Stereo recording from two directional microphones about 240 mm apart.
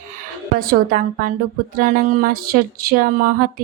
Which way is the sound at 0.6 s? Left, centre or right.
Right.